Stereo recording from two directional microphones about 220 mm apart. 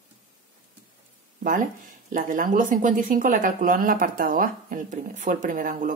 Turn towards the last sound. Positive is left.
turn(degrees=-40)  # may be behind; listen again after turning